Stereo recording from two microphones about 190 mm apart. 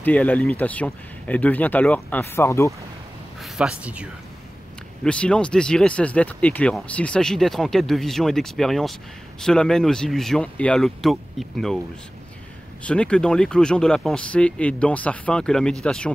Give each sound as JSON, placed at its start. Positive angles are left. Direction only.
{"t": 0.0, "sound": "speech", "side_deg": 10}
{"t": 3.3, "sound": "speech", "side_deg": 0}
{"t": 5.0, "sound": "speech", "side_deg": 5}
{"t": 12.8, "sound": "speech", "side_deg": 5}